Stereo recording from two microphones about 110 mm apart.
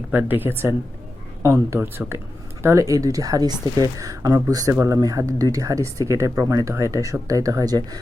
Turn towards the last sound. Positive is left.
turn(degrees=-35)  # may be behind; listen again after turning